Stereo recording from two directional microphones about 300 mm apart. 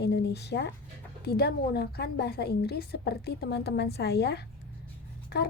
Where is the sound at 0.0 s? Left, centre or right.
Left.